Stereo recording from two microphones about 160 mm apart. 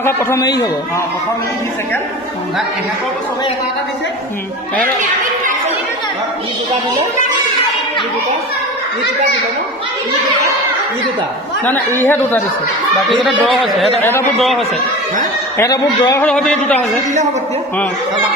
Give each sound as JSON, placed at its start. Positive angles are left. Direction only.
{"t": 0.0, "sound": "a man's voice", "side_deg": 15}
{"t": 11.6, "sound": "speech", "side_deg": 10}
{"t": 13.2, "sound": "speech", "side_deg": 0}
{"t": 15.6, "sound": "a man's voice", "side_deg": 20}
{"t": 16.2, "sound": "speech", "side_deg": 5}